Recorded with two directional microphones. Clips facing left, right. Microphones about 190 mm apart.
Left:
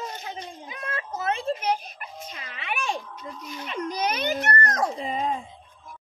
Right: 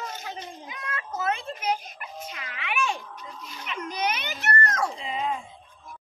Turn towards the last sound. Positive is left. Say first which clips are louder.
# left 2 dB
turn(degrees=40)  # may be behind; listen again after turning